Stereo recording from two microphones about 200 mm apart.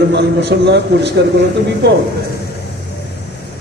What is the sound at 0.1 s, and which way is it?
A man's voice, 60° right (ahead or behind).